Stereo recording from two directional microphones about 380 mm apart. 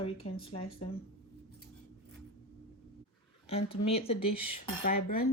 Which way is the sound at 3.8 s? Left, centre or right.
Centre.